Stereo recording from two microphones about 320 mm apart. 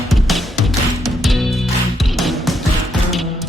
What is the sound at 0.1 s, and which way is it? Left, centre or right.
Music, centre.